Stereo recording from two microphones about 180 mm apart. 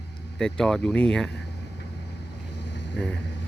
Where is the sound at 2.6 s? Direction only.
75° left (ahead or behind).